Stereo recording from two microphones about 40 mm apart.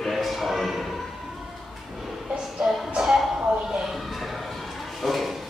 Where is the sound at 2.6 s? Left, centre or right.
Right.